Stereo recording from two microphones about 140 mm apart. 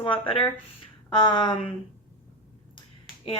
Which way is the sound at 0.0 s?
35° left (ahead or behind).